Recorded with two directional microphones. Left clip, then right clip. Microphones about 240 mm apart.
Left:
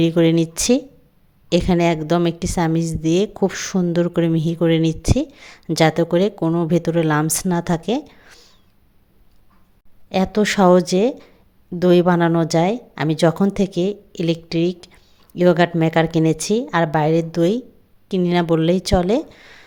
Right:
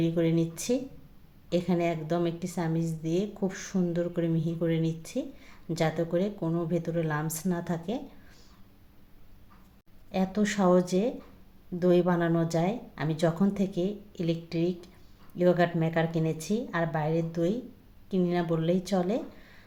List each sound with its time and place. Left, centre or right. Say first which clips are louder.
0.0 s a woman's voice: left 11 dB; left
10.1 s a woman's voice: left 11 dB; left